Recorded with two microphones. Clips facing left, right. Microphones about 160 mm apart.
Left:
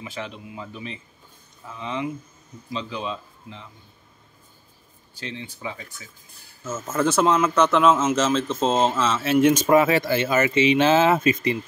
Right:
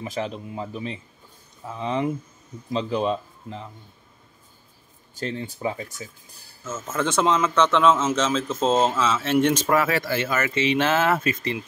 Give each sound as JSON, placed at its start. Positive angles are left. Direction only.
{"t": 0.0, "sound": "speech", "side_deg": -40}
{"t": 5.1, "sound": "speech", "side_deg": -45}
{"t": 6.6, "sound": "a man's voice", "side_deg": 10}